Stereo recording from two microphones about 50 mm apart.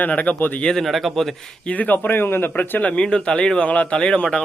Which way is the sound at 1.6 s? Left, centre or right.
Left.